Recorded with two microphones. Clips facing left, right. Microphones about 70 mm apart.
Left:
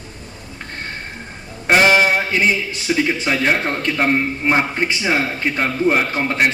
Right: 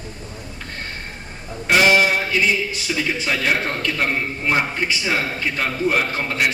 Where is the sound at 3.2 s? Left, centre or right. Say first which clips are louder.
Left 3 dB; left.